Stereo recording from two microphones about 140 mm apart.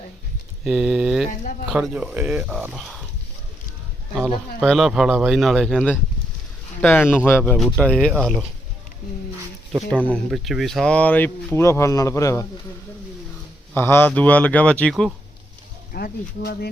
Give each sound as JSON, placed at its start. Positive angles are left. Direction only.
{"t": 0.6, "sound": "speech", "side_deg": -5}
{"t": 4.6, "sound": "speech", "side_deg": 0}
{"t": 9.9, "sound": "speech", "side_deg": 10}
{"t": 13.7, "sound": "speech", "side_deg": 15}
{"t": 15.9, "sound": "speech", "side_deg": 90}